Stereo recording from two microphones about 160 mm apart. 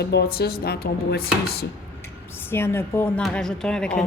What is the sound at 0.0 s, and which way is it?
Speech, 90° left.